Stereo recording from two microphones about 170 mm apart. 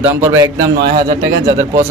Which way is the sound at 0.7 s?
75° right (ahead or behind).